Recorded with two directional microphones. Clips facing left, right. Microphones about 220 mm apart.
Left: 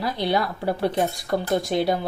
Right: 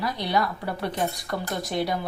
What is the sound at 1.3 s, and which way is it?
Speech, 30° left (ahead or behind).